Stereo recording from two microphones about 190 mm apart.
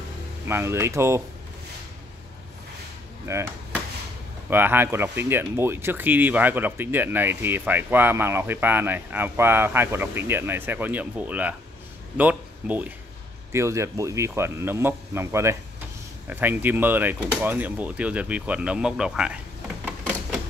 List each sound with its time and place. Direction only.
0.5 s speech: 15° right (ahead or behind)
3.3 s speech: 15° right (ahead or behind)
4.5 s speech: 10° right (ahead or behind)
19.8 s a sound: 5° right (ahead or behind)